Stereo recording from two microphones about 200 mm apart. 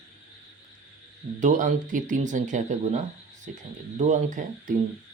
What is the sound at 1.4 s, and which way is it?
Speech, 40° right (ahead or behind).